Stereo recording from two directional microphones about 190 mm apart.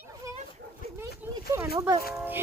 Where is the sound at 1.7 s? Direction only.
20° right (ahead or behind).